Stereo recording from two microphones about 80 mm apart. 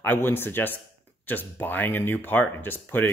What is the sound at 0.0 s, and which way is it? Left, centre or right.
A man's voice, left.